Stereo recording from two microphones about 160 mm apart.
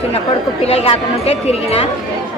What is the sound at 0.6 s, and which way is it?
Speech, 40° left (ahead or behind).